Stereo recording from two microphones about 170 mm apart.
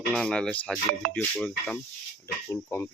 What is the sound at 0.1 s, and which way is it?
Speech, 5° left (ahead or behind).